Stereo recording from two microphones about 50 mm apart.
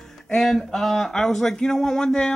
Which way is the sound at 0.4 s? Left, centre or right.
Centre.